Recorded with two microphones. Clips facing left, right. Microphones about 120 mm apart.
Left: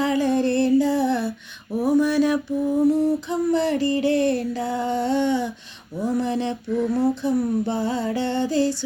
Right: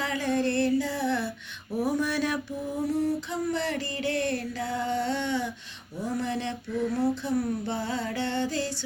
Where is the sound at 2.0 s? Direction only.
10° left (ahead or behind).